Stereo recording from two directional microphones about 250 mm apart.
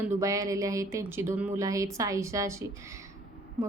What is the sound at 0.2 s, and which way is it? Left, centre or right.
A woman's voice, centre.